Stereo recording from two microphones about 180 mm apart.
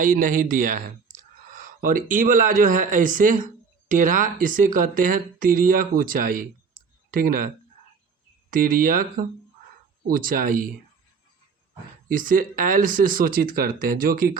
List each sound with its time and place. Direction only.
0.0 s speech: 45° right (ahead or behind)
12.0 s speech: 50° right (ahead or behind)